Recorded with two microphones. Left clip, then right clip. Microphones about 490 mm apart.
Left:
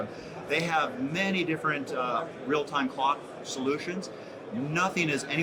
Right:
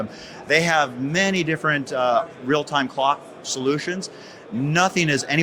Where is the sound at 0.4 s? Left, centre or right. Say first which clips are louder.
Right 9 dB; right.